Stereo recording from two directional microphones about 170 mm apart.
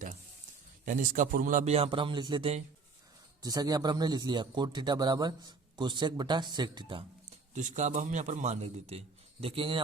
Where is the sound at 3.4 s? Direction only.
20° right (ahead or behind).